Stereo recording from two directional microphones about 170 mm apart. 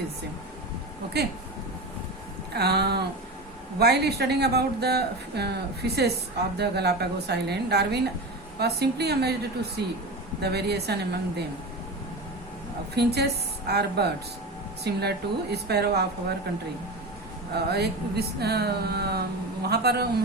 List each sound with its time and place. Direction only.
1.2 s speech: 75° right (ahead or behind)
2.5 s speech: 70° right (ahead or behind)
13.0 s speech: 75° right (ahead or behind)
17.7 s speech: 70° right (ahead or behind)